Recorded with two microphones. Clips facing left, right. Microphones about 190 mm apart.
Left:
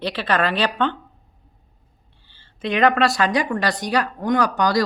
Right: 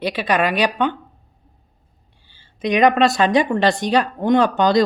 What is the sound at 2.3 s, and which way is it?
Speech, 15° right (ahead or behind).